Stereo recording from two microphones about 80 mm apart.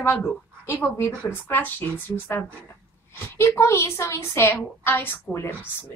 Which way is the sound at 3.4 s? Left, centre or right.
Left.